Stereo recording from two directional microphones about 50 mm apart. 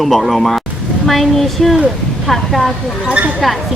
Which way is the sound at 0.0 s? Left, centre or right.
Centre.